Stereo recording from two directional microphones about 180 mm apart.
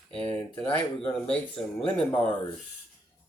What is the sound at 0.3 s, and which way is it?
Speech, 10° left (ahead or behind).